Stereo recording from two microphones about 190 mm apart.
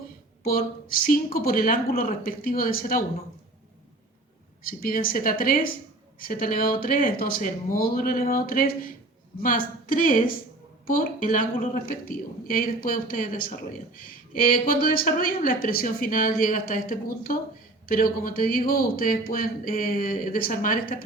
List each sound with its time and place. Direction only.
0.4 s a woman's voice: 50° left (ahead or behind)
4.6 s a woman's voice: 50° left (ahead or behind)